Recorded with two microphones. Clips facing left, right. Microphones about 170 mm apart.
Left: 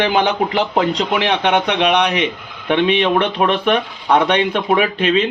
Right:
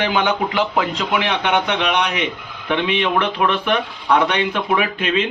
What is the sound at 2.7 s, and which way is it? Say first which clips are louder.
Speech: left 4 dB; 35° left (ahead or behind).